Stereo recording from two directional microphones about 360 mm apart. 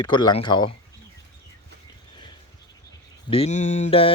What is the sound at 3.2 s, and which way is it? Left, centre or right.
Speech, centre.